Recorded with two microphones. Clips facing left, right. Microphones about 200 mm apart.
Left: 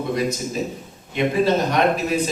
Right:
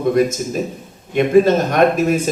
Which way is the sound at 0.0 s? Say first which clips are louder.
Right 7 dB; 50° right (ahead or behind).